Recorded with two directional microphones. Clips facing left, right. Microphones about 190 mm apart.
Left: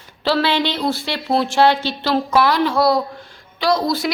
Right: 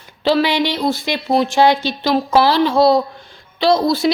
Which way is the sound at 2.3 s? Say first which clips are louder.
Right 3 dB; 30° right (ahead or behind).